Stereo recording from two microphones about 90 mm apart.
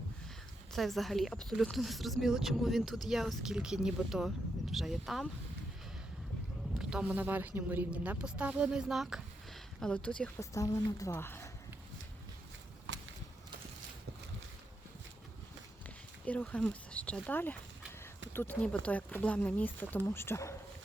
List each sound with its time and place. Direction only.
0.7 s a woman's voice: centre (ahead or behind)
6.7 s a sound: 10° right (ahead or behind)
7.1 s a woman's voice: 20° right (ahead or behind)
9.8 s speech: 10° left (ahead or behind)
10.3 s a woman's voice: 40° left (ahead or behind)
11.1 s speech: 25° left (ahead or behind)
16.2 s speech: 15° left (ahead or behind)